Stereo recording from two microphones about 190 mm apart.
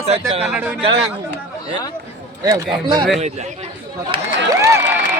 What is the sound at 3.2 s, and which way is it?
Speech, 35° right (ahead or behind).